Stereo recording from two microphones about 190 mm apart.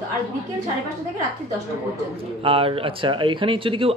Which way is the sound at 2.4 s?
30° right (ahead or behind).